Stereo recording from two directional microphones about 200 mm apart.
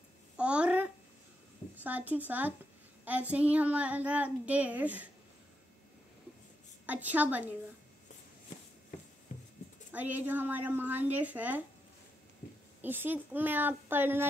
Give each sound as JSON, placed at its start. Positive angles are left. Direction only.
{"t": 0.4, "sound": "a sound", "side_deg": -5}
{"t": 1.8, "sound": "speech", "side_deg": -10}
{"t": 6.9, "sound": "speech", "side_deg": -10}
{"t": 9.3, "sound": "a sound", "side_deg": 40}
{"t": 9.9, "sound": "speech", "side_deg": -10}
{"t": 12.8, "sound": "speech", "side_deg": -10}